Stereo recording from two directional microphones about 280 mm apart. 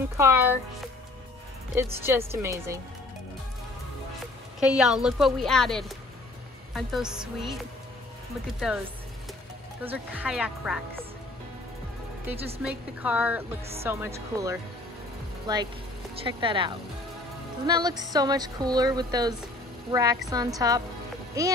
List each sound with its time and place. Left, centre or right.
0.2 s speech: centre
1.8 s speech: centre
4.6 s a woman's voice: centre
8.5 s a woman's voice: centre
9.8 s a woman's voice: centre
12.6 s a woman's voice: centre